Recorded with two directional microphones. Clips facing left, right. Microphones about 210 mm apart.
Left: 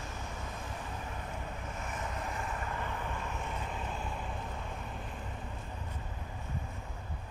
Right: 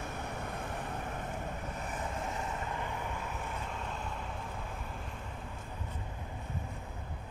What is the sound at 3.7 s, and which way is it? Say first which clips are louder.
Vehicle: left 1 dB; 5° left (ahead or behind).